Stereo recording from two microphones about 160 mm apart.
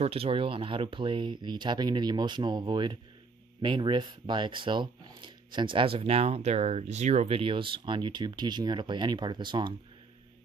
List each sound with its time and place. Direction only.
0.0 s speech: 35° right (ahead or behind)